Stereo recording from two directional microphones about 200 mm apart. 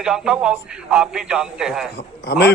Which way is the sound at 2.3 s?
55° left (ahead or behind).